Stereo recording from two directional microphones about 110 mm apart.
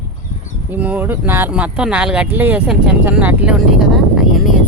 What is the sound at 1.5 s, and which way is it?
Speech, 10° right (ahead or behind).